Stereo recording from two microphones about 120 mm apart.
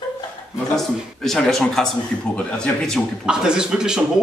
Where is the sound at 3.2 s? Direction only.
5° right (ahead or behind).